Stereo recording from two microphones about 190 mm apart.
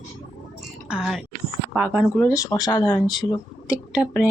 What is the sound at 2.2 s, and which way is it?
Speech, 15° left (ahead or behind).